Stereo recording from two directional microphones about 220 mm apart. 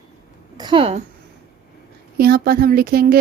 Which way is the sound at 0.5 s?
20° right (ahead or behind).